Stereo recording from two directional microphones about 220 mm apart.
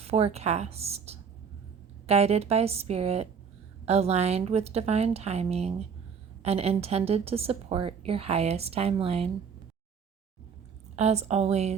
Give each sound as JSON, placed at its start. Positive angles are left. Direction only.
{"t": 0.0, "sound": "a woman's voice", "side_deg": -30}
{"t": 10.9, "sound": "a woman's voice", "side_deg": -30}